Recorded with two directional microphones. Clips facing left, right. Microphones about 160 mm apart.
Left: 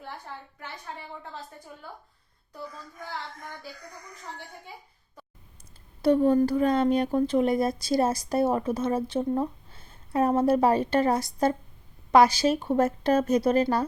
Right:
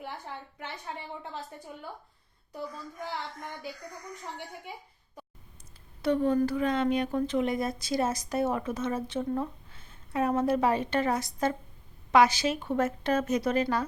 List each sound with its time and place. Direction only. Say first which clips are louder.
6.0 s speech: left 5 dB; 35° left (ahead or behind)